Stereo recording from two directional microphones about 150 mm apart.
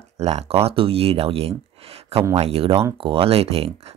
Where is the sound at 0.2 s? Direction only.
45° right (ahead or behind).